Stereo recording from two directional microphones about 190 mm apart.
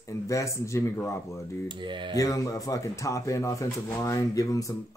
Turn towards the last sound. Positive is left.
turn(degrees=15)  # may be behind; listen again after turning